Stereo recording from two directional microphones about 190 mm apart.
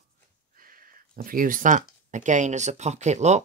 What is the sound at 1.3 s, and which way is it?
Speech, 45° right (ahead or behind).